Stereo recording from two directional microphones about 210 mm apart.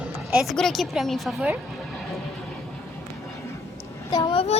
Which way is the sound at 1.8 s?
Centre (ahead or behind).